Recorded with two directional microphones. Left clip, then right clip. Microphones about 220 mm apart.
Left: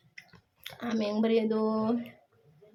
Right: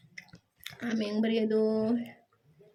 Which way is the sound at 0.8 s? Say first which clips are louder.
Left 2 dB; 5° right (ahead or behind).